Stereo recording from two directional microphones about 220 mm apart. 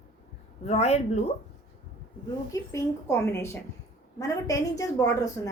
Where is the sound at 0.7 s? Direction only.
30° left (ahead or behind).